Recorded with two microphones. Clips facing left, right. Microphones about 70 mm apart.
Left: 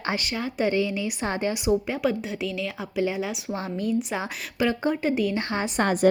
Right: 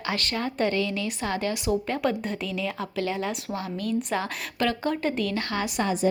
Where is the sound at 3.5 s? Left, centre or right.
Left.